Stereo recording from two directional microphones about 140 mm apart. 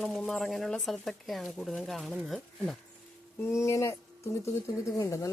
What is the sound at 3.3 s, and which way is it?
Speech, 20° left (ahead or behind).